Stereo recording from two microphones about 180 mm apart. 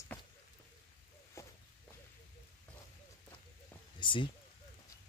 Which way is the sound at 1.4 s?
15° left (ahead or behind).